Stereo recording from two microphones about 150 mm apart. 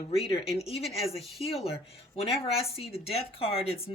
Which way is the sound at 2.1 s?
40° left (ahead or behind).